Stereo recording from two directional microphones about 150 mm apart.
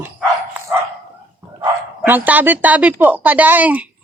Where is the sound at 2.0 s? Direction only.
10° right (ahead or behind).